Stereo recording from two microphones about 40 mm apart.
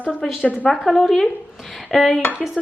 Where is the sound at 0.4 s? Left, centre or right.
Left.